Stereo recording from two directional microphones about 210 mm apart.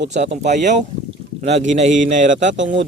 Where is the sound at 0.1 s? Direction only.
35° right (ahead or behind).